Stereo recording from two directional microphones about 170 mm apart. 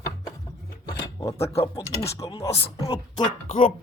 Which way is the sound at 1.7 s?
20° left (ahead or behind).